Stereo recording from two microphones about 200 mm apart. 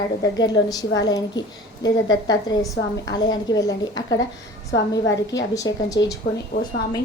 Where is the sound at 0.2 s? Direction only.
20° left (ahead or behind).